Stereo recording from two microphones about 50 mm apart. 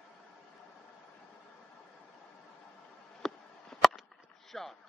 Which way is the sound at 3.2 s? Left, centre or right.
Centre.